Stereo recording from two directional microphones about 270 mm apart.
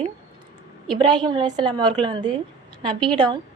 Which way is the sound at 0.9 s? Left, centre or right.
Centre.